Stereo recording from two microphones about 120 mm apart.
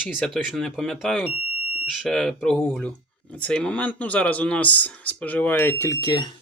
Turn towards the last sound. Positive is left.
turn(degrees=30)  # may be behind; listen again after turning